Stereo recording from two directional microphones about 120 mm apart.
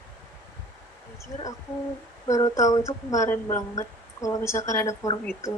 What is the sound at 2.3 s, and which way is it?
A woman's voice, 30° left (ahead or behind).